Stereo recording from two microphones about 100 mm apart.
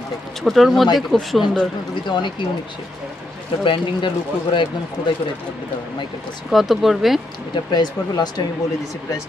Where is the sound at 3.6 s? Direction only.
55° left (ahead or behind).